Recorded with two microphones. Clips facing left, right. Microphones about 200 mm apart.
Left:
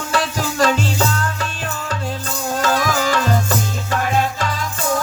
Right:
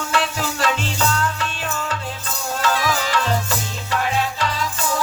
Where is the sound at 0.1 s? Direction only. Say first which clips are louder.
Left 3 dB; 40° left (ahead or behind).